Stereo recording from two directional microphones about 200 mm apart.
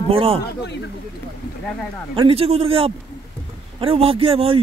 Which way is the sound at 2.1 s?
30° right (ahead or behind).